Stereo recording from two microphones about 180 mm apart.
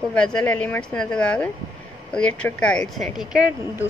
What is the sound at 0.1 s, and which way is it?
A woman's voice, 5° left (ahead or behind).